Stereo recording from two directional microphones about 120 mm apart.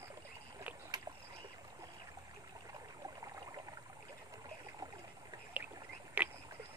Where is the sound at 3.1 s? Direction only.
30° right (ahead or behind).